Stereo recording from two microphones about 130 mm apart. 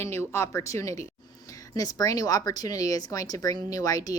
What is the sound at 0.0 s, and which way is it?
A woman's voice, 20° left (ahead or behind).